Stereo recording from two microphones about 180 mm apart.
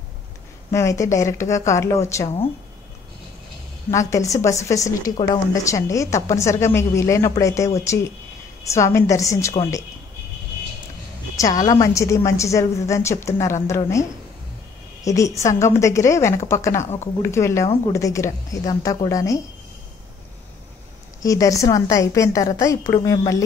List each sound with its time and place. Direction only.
0.7 s a woman's voice: 15° left (ahead or behind)
3.9 s a woman's voice: 15° left (ahead or behind)
11.6 s a woman's voice: 20° left (ahead or behind)
15.0 s a woman's voice: 15° left (ahead or behind)
21.2 s a woman's voice: 20° left (ahead or behind)